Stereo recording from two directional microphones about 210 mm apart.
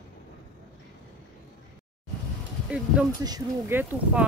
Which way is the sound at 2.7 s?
5° right (ahead or behind).